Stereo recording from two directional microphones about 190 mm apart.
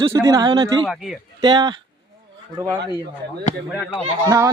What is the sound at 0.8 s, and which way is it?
Speech, centre (ahead or behind).